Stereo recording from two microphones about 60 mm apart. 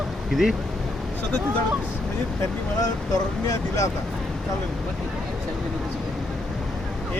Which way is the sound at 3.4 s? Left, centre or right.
Left.